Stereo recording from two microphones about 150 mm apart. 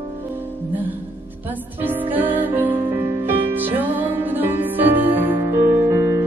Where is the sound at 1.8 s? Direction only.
10° right (ahead or behind).